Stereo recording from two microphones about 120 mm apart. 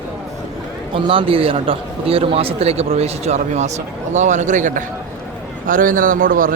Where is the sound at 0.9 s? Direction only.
50° right (ahead or behind); by 4.8 s 90° right.